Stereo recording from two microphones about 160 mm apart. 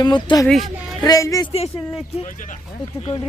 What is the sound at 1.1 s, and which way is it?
Speech, 20° left (ahead or behind).